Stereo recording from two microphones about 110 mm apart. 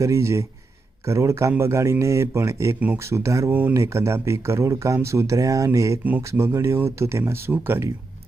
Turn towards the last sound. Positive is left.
turn(degrees=-20)  # may be behind; listen again after turning